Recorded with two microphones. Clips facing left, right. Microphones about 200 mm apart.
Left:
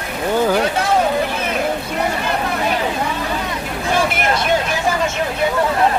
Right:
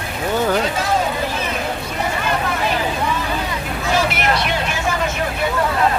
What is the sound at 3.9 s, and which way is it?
Vehicle, 50° left (ahead or behind).